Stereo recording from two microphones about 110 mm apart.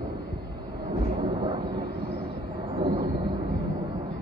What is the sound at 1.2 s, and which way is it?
Vehicle, 50° right (ahead or behind).